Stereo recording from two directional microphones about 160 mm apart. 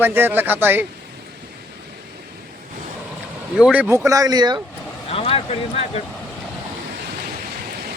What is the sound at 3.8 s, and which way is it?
Speech, 20° right (ahead or behind).